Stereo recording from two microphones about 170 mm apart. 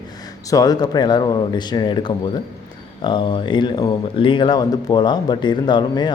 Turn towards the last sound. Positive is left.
turn(degrees=25)  # may be behind; listen again after turning